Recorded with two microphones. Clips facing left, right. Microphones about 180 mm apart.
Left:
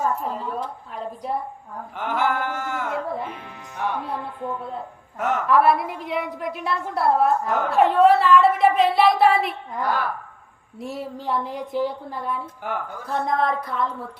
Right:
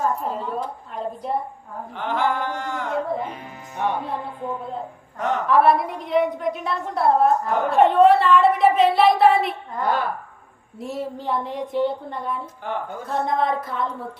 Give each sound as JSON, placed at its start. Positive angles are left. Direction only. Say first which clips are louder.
{"t": 0.2, "sound": "a woman's voice", "louder": "right 1 dB", "side_deg": 0}
{"t": 2.0, "sound": "a sound", "louder": "even", "side_deg": 10}
{"t": 3.8, "sound": "speech", "louder": "right 3 dB", "side_deg": -20}
{"t": 4.4, "sound": "a woman's voice", "louder": "right 1 dB", "side_deg": 0}
{"t": 9.8, "sound": "speech", "louder": "right 2 dB", "side_deg": -20}
{"t": 10.8, "sound": "a woman's voice", "louder": "right 2 dB", "side_deg": 0}